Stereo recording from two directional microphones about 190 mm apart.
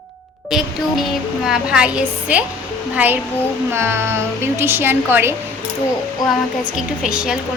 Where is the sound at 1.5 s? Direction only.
5° right (ahead or behind).